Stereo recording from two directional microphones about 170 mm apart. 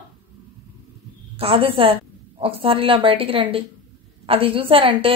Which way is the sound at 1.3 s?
35° right (ahead or behind).